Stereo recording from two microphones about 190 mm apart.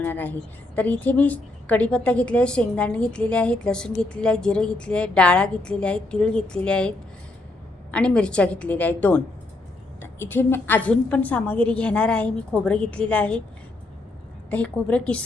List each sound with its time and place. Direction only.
0.0 s a woman's voice: 10° left (ahead or behind)
14.5 s a woman's voice: 5° left (ahead or behind)